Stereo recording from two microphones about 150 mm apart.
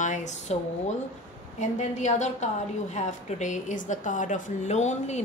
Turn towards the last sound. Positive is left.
turn(degrees=50)  # may be behind; listen again after turning